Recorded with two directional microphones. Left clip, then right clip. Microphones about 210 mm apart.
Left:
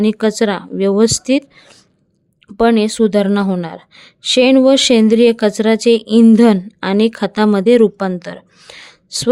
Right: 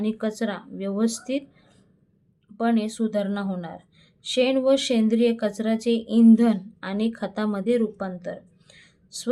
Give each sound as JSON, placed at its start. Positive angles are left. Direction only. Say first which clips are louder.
{"t": 0.0, "sound": "a woman's voice", "louder": "left 13 dB", "side_deg": 50}